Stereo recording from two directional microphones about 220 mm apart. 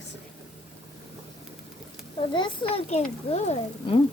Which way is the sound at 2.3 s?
20° left (ahead or behind).